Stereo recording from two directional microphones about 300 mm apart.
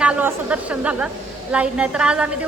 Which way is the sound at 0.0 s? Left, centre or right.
Centre.